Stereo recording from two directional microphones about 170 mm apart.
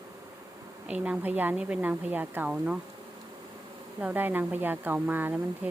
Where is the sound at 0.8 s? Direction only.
10° right (ahead or behind).